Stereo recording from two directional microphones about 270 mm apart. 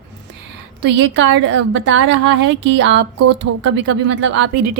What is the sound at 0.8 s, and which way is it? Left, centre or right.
A woman's voice, right.